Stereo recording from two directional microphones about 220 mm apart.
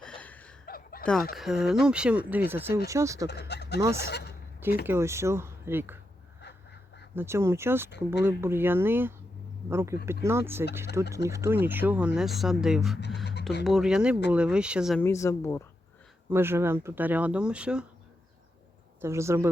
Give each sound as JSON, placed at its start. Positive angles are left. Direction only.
{"t": 0.0, "sound": "chuckle", "side_deg": 5}
{"t": 0.6, "sound": "chuckle", "side_deg": 40}
{"t": 1.4, "sound": "speech", "side_deg": 0}
{"t": 3.2, "sound": "speech", "side_deg": 50}
{"t": 4.9, "sound": "speech", "side_deg": -10}
{"t": 7.2, "sound": "speech", "side_deg": -10}
{"t": 7.9, "sound": "speech", "side_deg": 50}
{"t": 8.2, "sound": "speech", "side_deg": -10}
{"t": 15.0, "sound": "a woman's voice", "side_deg": 15}
{"t": 16.3, "sound": "speech", "side_deg": -10}
{"t": 19.0, "sound": "speech", "side_deg": -10}